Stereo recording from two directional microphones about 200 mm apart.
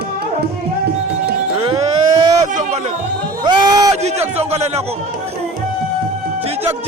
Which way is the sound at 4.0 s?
30° right (ahead or behind).